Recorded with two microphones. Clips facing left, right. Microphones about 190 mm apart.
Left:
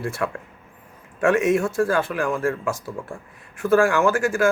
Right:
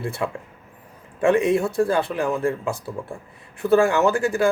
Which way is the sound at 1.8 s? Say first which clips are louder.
Right 1 dB; 20° right (ahead or behind).